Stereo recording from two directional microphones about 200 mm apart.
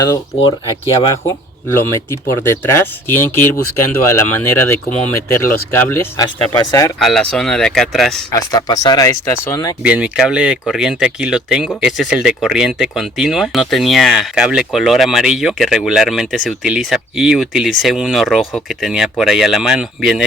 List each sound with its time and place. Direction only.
2.4 s speech: 15° left (ahead or behind)
7.0 s speech: 5° left (ahead or behind)
8.3 s speech: 20° left (ahead or behind)
9.8 s speech: 5° right (ahead or behind)